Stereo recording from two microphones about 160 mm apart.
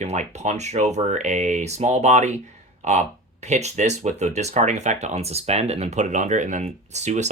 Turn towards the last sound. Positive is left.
turn(degrees=-45)  # may be behind; listen again after turning